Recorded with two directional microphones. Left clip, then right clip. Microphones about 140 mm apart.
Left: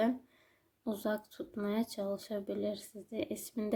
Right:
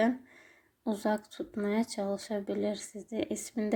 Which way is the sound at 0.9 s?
20° left (ahead or behind).